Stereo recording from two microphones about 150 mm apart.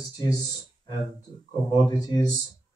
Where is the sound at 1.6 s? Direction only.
25° left (ahead or behind).